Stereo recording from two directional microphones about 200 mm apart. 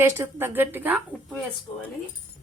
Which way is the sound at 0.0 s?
10° right (ahead or behind).